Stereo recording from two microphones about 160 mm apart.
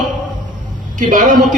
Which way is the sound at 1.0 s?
55° right (ahead or behind).